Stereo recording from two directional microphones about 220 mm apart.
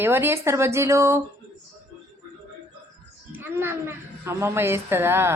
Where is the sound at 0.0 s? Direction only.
10° right (ahead or behind).